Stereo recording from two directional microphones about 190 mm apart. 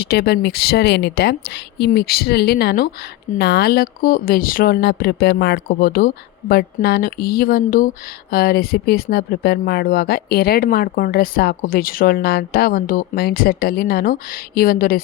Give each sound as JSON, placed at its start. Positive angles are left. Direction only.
{"t": 0.0, "sound": "speech", "side_deg": 55}